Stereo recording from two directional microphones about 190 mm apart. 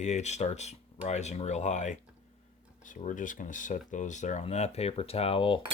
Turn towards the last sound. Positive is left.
turn(degrees=25)  # may be behind; listen again after turning